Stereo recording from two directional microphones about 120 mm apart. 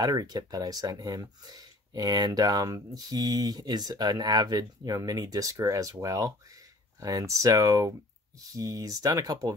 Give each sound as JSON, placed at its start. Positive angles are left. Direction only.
{"t": 0.0, "sound": "speech", "side_deg": -30}